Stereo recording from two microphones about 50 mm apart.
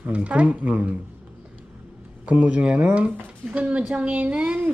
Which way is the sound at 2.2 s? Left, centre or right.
Right.